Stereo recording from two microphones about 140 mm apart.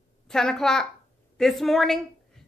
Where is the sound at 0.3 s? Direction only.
5° left (ahead or behind).